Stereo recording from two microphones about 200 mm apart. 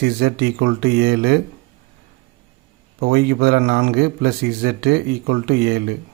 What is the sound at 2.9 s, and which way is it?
Speech, 55° right (ahead or behind).